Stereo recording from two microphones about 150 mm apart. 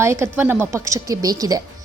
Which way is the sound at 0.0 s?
15° right (ahead or behind).